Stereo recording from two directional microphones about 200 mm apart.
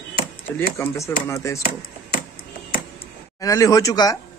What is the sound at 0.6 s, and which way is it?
Speech, 15° left (ahead or behind).